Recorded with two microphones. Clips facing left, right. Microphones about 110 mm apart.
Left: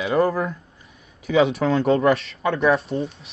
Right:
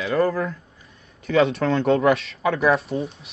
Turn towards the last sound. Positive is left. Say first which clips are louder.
# left 1 dB
turn(degrees=0)  # may be behind; listen again after turning